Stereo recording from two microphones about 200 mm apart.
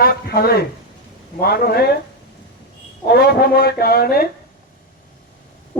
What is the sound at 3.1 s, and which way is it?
Speech, 55° left (ahead or behind).